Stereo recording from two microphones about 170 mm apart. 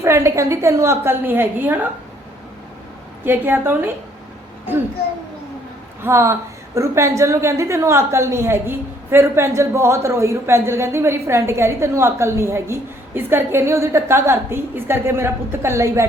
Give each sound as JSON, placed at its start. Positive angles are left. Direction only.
{"t": 0.0, "sound": "a woman's voice", "side_deg": -15}
{"t": 3.2, "sound": "a woman's voice", "side_deg": -10}
{"t": 6.0, "sound": "a woman's voice", "side_deg": -15}